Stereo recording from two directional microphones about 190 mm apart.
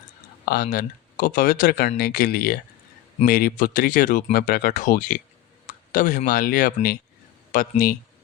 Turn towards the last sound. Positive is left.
turn(degrees=50)  # may be behind; listen again after turning